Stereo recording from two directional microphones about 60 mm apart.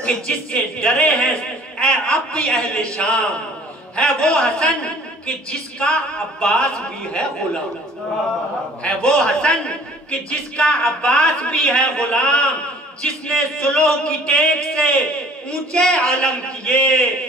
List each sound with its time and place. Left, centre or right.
0.0 s a man's voice: centre
8.8 s a man's voice: centre